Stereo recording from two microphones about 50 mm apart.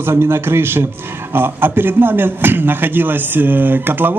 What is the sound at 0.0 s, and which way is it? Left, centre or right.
A man's voice, right.